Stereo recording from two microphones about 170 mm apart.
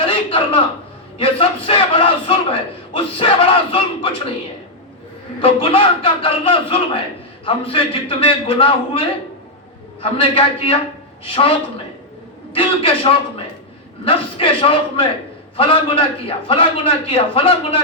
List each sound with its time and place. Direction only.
0.0 s a sound: 35° left (ahead or behind)
1.2 s a man's voice: 35° left (ahead or behind)
5.4 s a man's voice: 35° left (ahead or behind)
12.5 s a man's voice: 35° left (ahead or behind)